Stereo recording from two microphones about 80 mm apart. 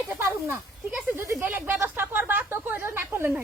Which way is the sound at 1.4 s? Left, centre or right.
Right.